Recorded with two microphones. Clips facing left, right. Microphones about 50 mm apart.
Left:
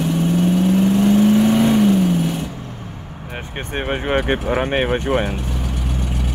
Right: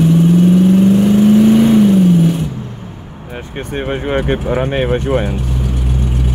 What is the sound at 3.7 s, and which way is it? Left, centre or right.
Speech, centre.